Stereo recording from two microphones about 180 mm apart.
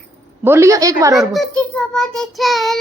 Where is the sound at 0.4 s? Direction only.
15° right (ahead or behind).